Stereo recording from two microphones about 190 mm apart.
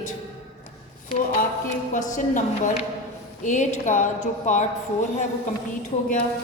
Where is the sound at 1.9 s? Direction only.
40° left (ahead or behind).